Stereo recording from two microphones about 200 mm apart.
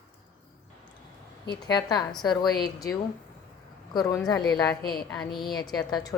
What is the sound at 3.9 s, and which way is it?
Speech, 15° left (ahead or behind).